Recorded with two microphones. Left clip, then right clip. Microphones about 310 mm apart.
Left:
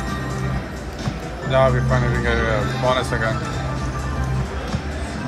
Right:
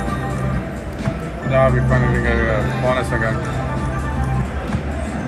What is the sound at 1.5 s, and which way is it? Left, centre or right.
Speech, centre.